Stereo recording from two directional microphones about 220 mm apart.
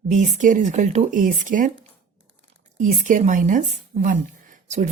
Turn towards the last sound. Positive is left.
turn(degrees=-35)  # may be behind; listen again after turning